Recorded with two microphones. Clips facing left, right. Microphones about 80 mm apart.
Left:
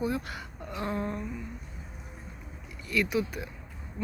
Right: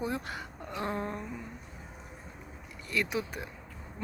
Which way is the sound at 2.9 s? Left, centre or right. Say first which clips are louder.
Left 4 dB; right.